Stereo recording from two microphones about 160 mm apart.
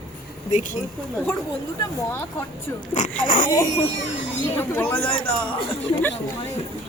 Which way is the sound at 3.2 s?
55° left (ahead or behind).